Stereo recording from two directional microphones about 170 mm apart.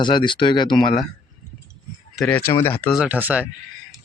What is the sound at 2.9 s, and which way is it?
Speech, 10° right (ahead or behind).